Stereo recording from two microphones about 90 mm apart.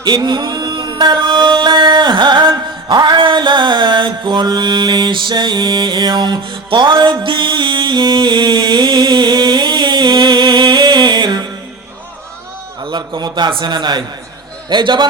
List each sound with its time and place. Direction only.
0.0 s music: 55° right (ahead or behind)
12.8 s a man's voice: 55° right (ahead or behind)